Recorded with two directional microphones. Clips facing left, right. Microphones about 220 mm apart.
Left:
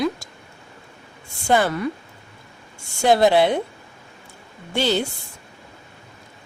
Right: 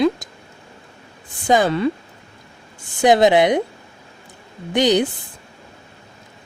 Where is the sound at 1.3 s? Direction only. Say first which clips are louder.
Right 3 dB; 15° right (ahead or behind).